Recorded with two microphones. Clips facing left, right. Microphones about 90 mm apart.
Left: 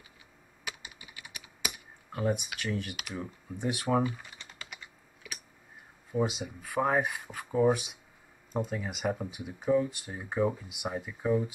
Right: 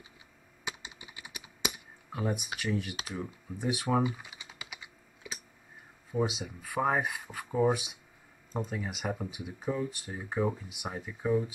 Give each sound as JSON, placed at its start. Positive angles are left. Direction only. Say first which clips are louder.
{"t": 0.7, "sound": "computer keyboard", "louder": "right 2 dB", "side_deg": -25}
{"t": 2.0, "sound": "speech", "louder": "left 3 dB", "side_deg": -5}
{"t": 4.0, "sound": "typing", "louder": "even", "side_deg": -10}
{"t": 5.2, "sound": "a sound", "louder": "right 2 dB", "side_deg": -25}
{"t": 6.1, "sound": "speech", "louder": "left 1 dB", "side_deg": 0}